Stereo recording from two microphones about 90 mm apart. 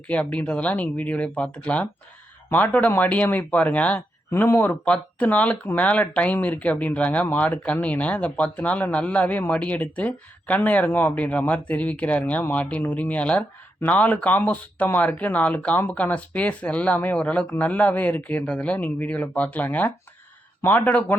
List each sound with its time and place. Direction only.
0.1 s speech: 15° left (ahead or behind)